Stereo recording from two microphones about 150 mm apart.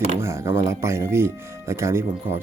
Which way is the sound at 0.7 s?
20° right (ahead or behind).